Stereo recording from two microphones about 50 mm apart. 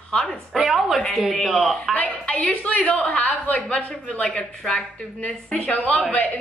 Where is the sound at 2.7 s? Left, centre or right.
Left.